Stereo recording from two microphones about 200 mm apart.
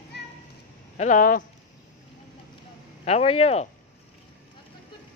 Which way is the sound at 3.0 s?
30° left (ahead or behind).